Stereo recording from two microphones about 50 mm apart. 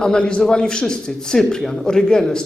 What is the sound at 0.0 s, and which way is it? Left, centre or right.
A man's voice, centre.